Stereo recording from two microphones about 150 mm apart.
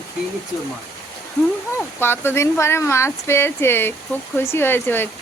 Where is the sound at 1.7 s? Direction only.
15° left (ahead or behind).